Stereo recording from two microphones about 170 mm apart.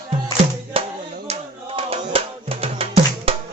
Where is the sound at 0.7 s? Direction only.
35° right (ahead or behind).